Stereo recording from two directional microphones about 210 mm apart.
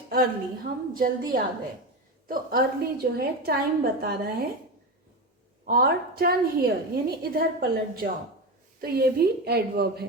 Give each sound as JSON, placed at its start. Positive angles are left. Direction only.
{"t": 0.1, "sound": "a woman's voice", "side_deg": -45}
{"t": 5.6, "sound": "a woman's voice", "side_deg": -45}